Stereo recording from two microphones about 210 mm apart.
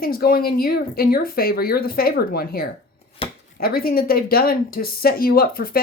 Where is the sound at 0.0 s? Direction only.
45° left (ahead or behind).